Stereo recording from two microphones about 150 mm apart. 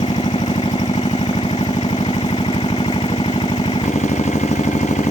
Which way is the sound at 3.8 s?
50° left (ahead or behind).